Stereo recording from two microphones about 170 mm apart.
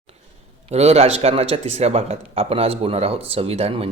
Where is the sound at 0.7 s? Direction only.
40° right (ahead or behind).